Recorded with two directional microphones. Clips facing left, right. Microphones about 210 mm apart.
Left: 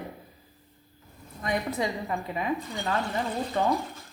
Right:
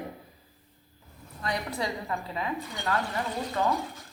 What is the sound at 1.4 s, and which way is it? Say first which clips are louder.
A woman's voice: left 3 dB; 20° left (ahead or behind).